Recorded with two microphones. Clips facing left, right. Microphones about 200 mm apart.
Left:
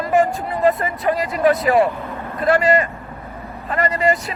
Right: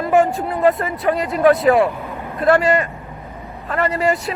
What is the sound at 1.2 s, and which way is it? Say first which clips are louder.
Speech: right 4 dB; centre (ahead or behind).